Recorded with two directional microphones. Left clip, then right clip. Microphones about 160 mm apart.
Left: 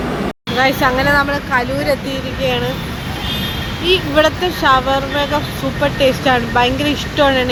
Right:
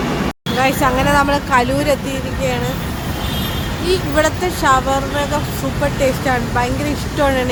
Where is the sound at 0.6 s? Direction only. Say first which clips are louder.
Left 2 dB; 5° right (ahead or behind).